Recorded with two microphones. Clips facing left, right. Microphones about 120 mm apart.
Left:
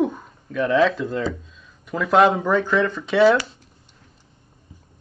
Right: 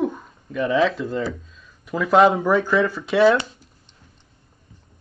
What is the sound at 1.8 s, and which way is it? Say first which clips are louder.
Speech: right 1 dB; centre (ahead or behind).